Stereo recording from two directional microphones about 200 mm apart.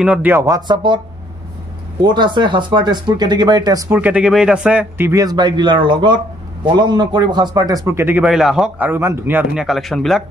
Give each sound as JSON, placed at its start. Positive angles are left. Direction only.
{"t": 0.0, "sound": "a man's voice", "side_deg": -5}
{"t": 2.0, "sound": "a man's voice", "side_deg": -20}